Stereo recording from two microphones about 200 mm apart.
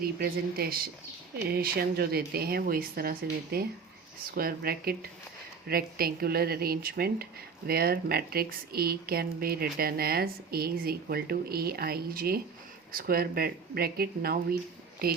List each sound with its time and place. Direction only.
0.0 s speech: 50° right (ahead or behind)